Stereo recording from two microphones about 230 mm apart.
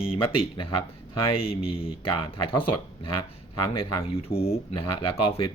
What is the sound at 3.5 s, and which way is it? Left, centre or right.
Speech, left.